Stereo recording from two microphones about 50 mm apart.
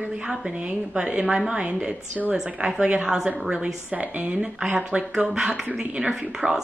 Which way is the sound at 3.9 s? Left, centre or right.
Right.